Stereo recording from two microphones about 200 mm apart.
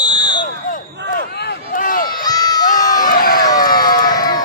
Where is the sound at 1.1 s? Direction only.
50° left (ahead or behind).